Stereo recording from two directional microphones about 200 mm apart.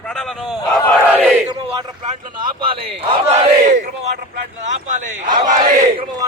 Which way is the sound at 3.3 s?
35° right (ahead or behind).